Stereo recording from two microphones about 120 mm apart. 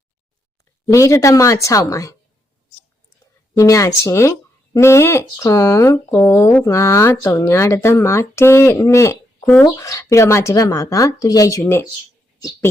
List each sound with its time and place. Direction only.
0.9 s speech: 25° left (ahead or behind)
3.6 s speech: 25° left (ahead or behind)